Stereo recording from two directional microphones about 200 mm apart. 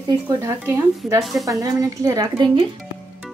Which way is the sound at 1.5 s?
15° right (ahead or behind).